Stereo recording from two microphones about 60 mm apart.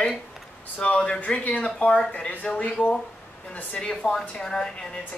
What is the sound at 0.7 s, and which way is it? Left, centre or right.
Speech, centre.